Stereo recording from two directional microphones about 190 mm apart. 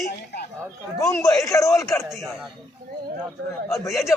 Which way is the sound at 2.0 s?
Centre (ahead or behind).